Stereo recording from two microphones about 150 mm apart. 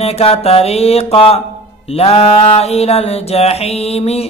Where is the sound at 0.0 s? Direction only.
40° left (ahead or behind).